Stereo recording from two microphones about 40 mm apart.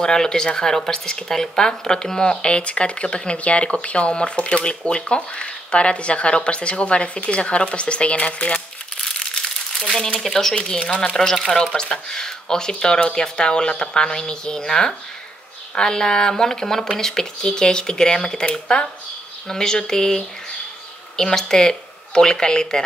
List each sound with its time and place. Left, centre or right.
0.0 s speech: centre; by 8.6 s left
9.0 s crumpling: left
9.8 s speech: centre